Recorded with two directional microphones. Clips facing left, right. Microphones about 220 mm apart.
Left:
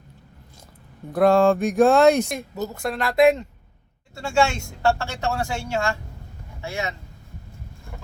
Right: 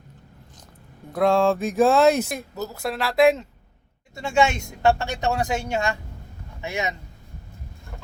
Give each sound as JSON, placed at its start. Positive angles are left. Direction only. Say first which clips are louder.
{"t": 1.1, "sound": "speech", "louder": "left 3 dB", "side_deg": 0}
{"t": 4.1, "sound": "speech", "louder": "even", "side_deg": -20}